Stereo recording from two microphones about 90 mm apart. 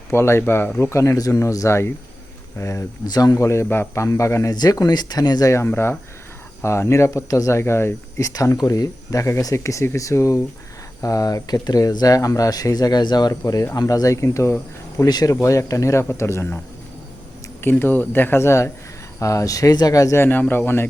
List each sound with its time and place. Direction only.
0.1 s speech: 30° left (ahead or behind)
3.1 s speech: 45° left (ahead or behind)
4.5 s speech: 45° left (ahead or behind)
5.6 s speech: 25° left (ahead or behind)
17.6 s speech: 25° left (ahead or behind)
20.2 s speech: 20° left (ahead or behind)